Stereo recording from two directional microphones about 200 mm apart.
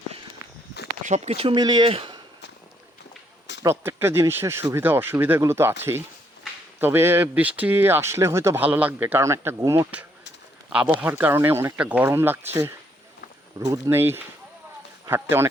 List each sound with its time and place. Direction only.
1.0 s speech: 35° right (ahead or behind)
3.6 s speech: 15° right (ahead or behind)